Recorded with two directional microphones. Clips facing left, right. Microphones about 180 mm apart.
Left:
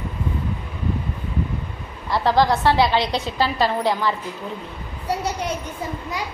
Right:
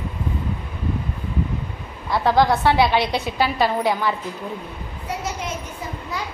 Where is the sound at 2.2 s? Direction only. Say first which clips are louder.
Even; 15° right (ahead or behind).